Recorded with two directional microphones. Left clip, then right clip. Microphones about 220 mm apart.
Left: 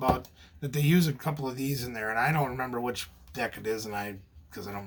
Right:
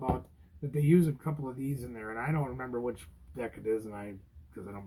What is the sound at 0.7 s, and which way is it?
Speech, 50° left (ahead or behind).